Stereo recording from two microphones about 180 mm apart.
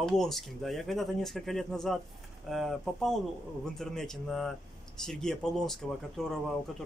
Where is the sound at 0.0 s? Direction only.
Centre (ahead or behind).